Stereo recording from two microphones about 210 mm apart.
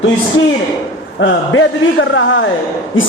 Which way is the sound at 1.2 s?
65° left (ahead or behind).